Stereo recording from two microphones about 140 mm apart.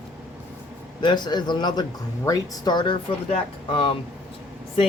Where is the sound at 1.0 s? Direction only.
30° left (ahead or behind).